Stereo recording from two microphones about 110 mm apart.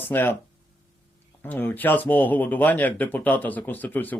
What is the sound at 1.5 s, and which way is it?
Speech, 15° left (ahead or behind).